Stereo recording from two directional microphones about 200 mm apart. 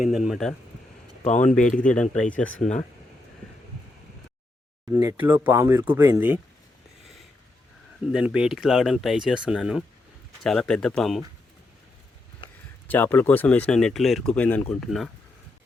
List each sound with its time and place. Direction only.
0.0 s speech: 5° right (ahead or behind)
1.2 s speech: 40° left (ahead or behind)
2.4 s speech: 5° left (ahead or behind)
4.9 s speech: 10° right (ahead or behind)
8.0 s speech: 5° right (ahead or behind)
12.9 s speech: 10° left (ahead or behind)